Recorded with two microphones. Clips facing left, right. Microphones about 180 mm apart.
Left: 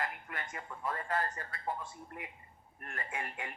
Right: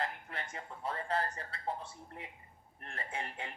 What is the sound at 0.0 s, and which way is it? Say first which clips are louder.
A woman's voice: even; 30° right (ahead or behind).